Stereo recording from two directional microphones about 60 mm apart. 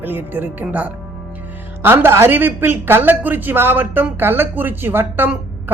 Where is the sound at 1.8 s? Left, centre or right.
Right.